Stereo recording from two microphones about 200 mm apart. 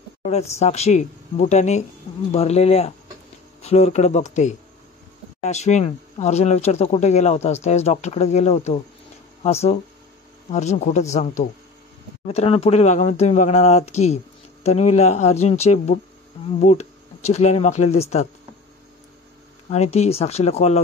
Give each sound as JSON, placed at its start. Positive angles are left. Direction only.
{"t": 0.2, "sound": "a sound", "side_deg": 35}
{"t": 0.6, "sound": "speech", "side_deg": 30}
{"t": 19.7, "sound": "speech", "side_deg": 35}